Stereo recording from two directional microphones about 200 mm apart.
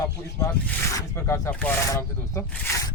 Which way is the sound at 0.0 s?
20° left (ahead or behind).